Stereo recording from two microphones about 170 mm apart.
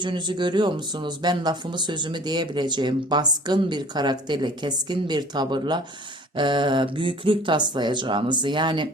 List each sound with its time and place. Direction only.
0.0 s speech: 25° right (ahead or behind)